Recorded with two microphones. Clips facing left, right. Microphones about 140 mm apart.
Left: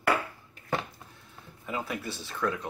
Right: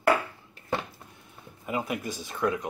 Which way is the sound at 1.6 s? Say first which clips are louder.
Right 3 dB; 10° right (ahead or behind).